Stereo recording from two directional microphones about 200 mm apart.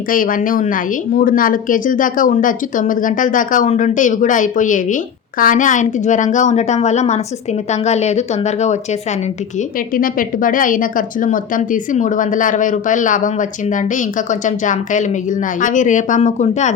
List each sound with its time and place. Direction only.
0.1 s a woman's voice: 45° left (ahead or behind)